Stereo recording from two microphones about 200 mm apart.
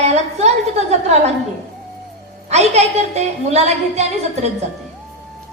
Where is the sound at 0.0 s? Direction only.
35° right (ahead or behind).